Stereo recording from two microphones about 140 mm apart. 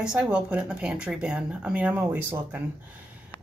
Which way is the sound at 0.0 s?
5° right (ahead or behind).